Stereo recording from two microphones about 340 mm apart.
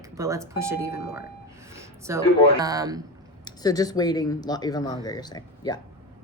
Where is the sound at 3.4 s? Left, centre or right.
Centre.